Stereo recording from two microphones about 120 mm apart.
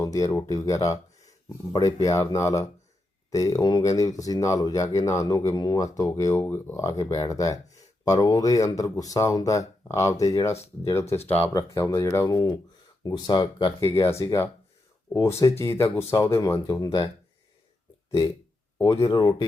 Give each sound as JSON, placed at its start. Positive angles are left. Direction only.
{"t": 0.0, "sound": "speech", "side_deg": 25}
{"t": 13.8, "sound": "speech", "side_deg": 25}
{"t": 18.8, "sound": "speech", "side_deg": 25}